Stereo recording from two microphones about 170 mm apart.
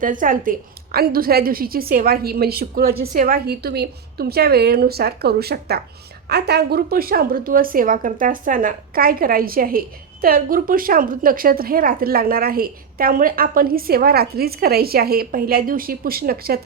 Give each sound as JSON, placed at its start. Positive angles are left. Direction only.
{"t": 0.0, "sound": "a woman's voice", "side_deg": -50}